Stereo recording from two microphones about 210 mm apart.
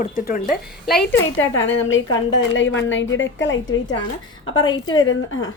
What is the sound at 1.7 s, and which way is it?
A woman's voice, 65° left (ahead or behind).